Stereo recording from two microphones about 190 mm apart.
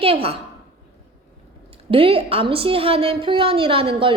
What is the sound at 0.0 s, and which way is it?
Speech, 30° right (ahead or behind).